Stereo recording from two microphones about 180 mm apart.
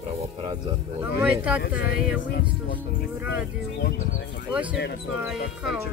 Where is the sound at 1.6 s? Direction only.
65° left (ahead or behind).